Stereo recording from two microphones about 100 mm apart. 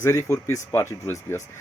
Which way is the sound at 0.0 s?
30° left (ahead or behind).